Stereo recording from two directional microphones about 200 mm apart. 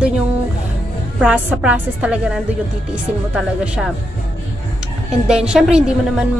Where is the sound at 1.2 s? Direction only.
5° right (ahead or behind).